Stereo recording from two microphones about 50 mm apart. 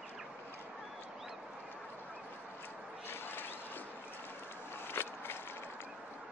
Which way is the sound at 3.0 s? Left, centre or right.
Left.